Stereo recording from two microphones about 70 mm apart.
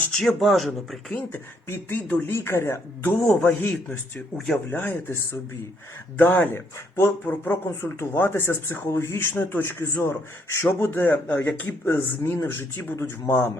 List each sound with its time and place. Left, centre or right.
0.1 s speech: centre
1.3 s speech: left
2.3 s speech: left
3.0 s speech: left
4.4 s speech: centre
4.7 s speech: left
9.3 s speech: left
9.6 s speech: left